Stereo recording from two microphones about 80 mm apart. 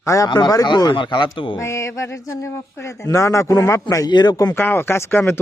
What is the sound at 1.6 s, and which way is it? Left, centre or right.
Speech, left.